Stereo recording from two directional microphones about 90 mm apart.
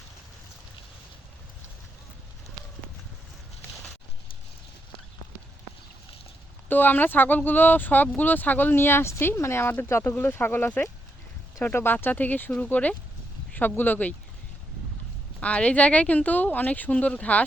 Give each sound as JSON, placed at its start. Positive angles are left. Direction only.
{"t": 6.7, "sound": "speech", "side_deg": 20}
{"t": 15.4, "sound": "speech", "side_deg": 15}